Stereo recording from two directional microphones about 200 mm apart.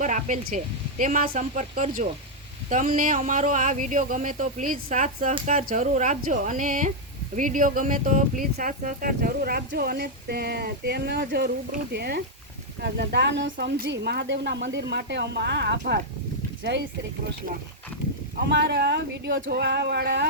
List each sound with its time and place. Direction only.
0.0 s speech: 40° right (ahead or behind); by 15.8 s 60° right (ahead or behind)
18.4 s speech: 60° right (ahead or behind)